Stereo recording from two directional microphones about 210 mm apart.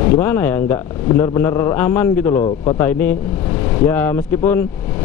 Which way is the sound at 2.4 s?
30° left (ahead or behind).